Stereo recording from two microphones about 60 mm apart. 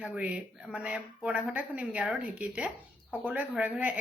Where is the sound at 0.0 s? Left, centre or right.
Right.